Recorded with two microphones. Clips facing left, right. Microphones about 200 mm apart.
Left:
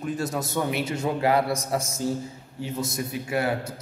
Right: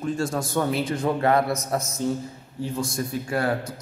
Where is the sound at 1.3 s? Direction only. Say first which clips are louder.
Right 1 dB; 30° left (ahead or behind).